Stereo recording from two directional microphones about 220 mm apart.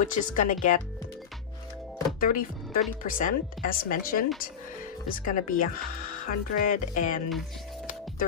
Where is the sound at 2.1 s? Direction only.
40° left (ahead or behind).